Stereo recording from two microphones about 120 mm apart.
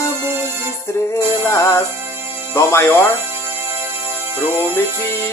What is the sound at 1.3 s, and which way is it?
Speech, 25° left (ahead or behind).